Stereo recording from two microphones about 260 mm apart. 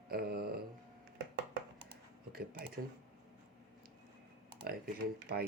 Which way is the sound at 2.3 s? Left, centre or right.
Right.